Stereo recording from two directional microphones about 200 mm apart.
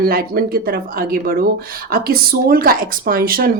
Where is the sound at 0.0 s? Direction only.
45° right (ahead or behind).